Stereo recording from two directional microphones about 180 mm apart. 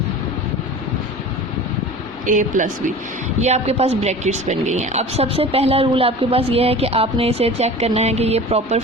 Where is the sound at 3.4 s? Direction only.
35° right (ahead or behind).